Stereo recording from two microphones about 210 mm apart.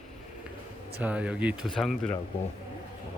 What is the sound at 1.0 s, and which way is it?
Speech, 5° right (ahead or behind).